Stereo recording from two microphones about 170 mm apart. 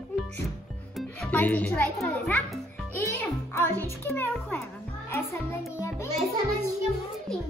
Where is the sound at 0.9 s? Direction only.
5° left (ahead or behind).